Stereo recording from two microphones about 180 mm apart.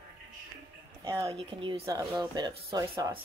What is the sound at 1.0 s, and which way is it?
Speech, 20° right (ahead or behind).